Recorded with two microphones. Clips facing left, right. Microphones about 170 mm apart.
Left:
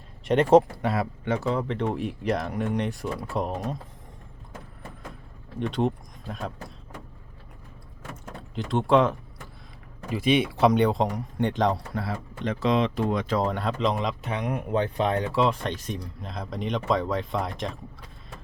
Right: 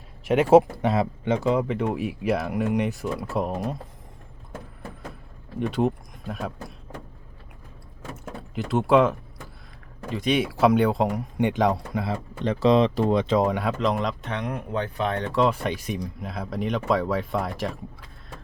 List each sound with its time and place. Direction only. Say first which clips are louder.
0.3 s speech: right 2 dB; 5° right (ahead or behind)
0.8 s speech: right 3 dB; 20° right (ahead or behind)
5.5 s speech: right 2 dB; 5° right (ahead or behind)
8.1 s door: right 3 dB; 5° right (ahead or behind)
10.1 s speech: left 1 dB; 5° left (ahead or behind)
12.0 s speech: right 4 dB; 25° right (ahead or behind); by 15.3 s 15° left (ahead or behind)
15.3 s speech: right 2 dB; 5° right (ahead or behind)